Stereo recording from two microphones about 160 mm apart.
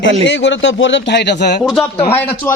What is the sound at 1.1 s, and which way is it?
Speech, 90° left.